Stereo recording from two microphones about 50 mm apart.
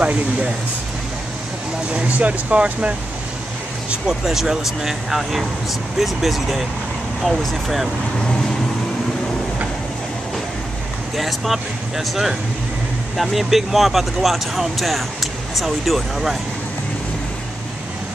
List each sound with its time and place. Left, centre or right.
0.0 s speech: right
1.9 s speech: right
4.1 s speech: centre
11.1 s speech: centre